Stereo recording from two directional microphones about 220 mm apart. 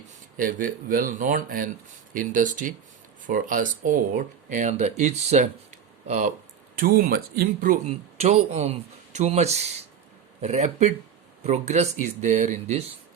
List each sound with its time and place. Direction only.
0.3 s speech: 40° right (ahead or behind)